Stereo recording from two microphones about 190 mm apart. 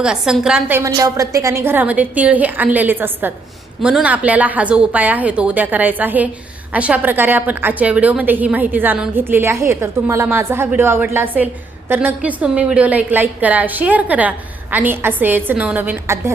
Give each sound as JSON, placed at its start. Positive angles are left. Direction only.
{"t": 0.0, "sound": "a woman's voice", "side_deg": -5}